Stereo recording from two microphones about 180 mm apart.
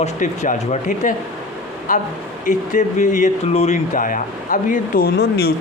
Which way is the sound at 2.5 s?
45° left (ahead or behind).